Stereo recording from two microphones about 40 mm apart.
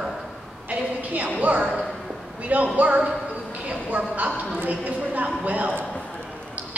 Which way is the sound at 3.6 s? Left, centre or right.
Right.